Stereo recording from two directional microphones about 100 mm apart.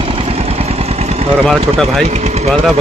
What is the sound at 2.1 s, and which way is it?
Speech, 90° right.